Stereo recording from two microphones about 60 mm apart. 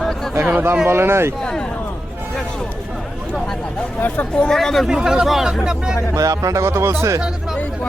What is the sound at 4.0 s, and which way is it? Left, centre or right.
Speech, left.